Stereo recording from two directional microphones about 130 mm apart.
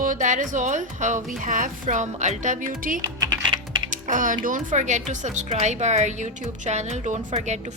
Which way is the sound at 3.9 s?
85° right.